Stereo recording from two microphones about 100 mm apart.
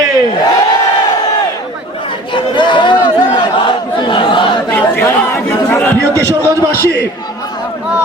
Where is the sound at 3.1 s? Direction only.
60° left (ahead or behind).